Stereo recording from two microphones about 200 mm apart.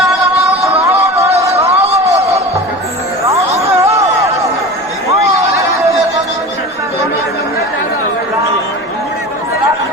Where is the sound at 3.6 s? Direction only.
15° right (ahead or behind).